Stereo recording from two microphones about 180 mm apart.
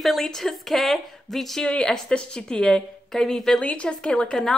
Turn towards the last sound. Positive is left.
turn(degrees=5)  # may be behind; listen again after turning